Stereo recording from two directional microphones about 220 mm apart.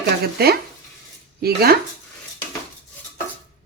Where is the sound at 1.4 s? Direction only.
45° right (ahead or behind).